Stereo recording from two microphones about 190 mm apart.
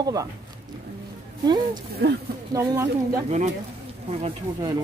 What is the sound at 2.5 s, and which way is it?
Speech, 15° right (ahead or behind).